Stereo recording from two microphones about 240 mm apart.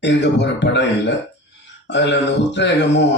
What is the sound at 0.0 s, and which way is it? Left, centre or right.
Speech, left.